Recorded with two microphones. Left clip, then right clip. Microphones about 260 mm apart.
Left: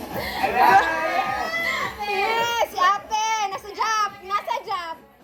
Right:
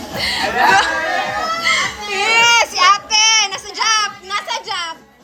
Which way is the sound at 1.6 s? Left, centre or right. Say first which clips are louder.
Right 9 dB; centre.